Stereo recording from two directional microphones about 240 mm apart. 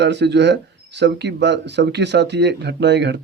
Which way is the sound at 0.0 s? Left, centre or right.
Right.